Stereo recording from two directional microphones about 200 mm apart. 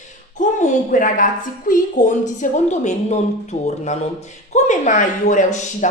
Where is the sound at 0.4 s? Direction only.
40° left (ahead or behind).